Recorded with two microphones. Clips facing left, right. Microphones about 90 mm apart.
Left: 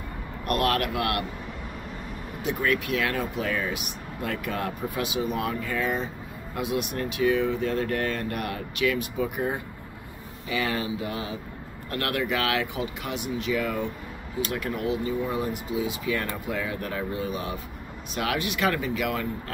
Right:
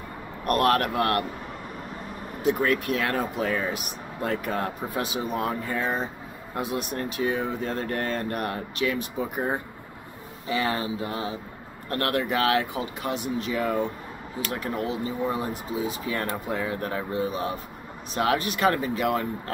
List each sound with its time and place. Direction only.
0.5 s speech: 40° right (ahead or behind)
2.4 s speech: 40° right (ahead or behind)
10.5 s speech: 35° right (ahead or behind)